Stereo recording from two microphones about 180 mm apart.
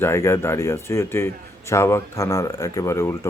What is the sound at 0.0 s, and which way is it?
Speech, 15° left (ahead or behind).